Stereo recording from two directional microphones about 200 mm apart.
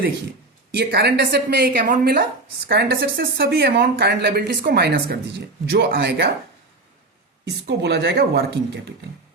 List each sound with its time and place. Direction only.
0.8 s speech: 55° right (ahead or behind)
7.4 s speech: 60° right (ahead or behind)